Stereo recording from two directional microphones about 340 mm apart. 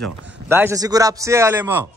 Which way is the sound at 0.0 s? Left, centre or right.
Centre.